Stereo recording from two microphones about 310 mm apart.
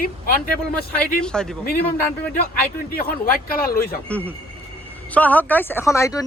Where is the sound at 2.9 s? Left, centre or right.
Left.